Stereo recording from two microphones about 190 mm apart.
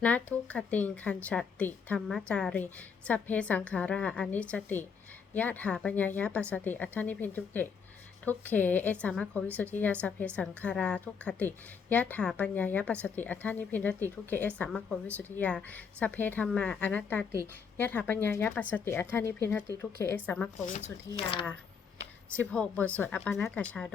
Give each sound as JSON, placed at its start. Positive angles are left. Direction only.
{"t": 0.0, "sound": "a woman's voice", "side_deg": 5}
{"t": 21.2, "sound": "speech", "side_deg": 30}
{"t": 22.4, "sound": "a woman's voice", "side_deg": 5}